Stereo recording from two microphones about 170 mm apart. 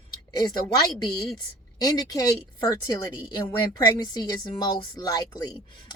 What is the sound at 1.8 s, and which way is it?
Speech, 20° left (ahead or behind).